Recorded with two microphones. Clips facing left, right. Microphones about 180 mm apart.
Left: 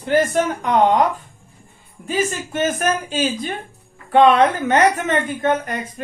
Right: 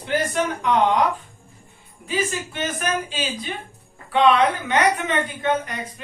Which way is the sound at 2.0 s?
45° left (ahead or behind).